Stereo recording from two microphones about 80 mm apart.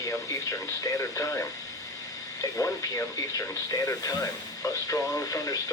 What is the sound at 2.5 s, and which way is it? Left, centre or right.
Speech, left.